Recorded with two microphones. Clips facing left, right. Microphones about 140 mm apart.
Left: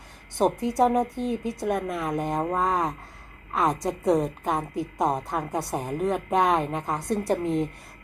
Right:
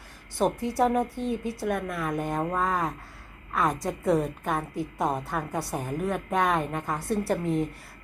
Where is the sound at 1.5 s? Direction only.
20° left (ahead or behind).